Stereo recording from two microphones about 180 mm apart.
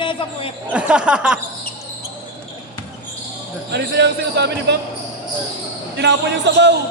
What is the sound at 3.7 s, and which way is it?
Speech, 70° right (ahead or behind).